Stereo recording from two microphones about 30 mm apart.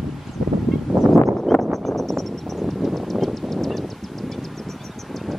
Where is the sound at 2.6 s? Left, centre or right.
Centre.